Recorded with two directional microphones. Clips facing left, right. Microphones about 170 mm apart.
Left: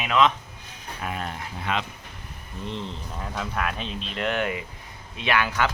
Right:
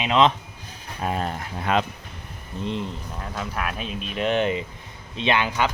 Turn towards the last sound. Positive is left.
turn(degrees=-20)  # may be behind; listen again after turning